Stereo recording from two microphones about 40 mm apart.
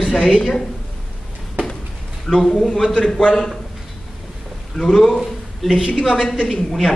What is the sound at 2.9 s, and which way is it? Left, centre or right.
Speech, left.